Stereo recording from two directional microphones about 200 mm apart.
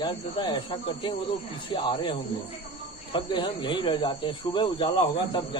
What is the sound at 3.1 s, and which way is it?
Speech, 25° left (ahead or behind).